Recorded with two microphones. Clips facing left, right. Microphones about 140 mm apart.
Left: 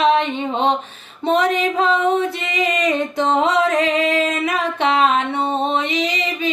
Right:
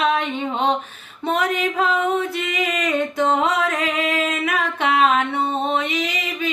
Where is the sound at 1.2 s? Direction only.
30° left (ahead or behind).